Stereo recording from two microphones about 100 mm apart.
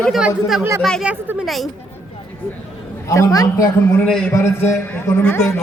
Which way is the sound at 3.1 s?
35° left (ahead or behind).